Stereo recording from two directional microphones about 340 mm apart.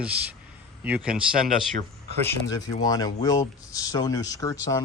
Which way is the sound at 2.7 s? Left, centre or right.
Centre.